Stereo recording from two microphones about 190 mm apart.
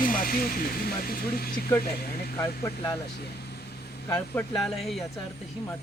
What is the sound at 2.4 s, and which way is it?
Speech, 15° left (ahead or behind).